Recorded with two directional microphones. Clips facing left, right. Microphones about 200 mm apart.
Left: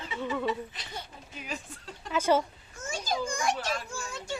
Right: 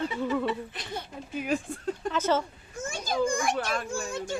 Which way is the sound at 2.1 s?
10° left (ahead or behind).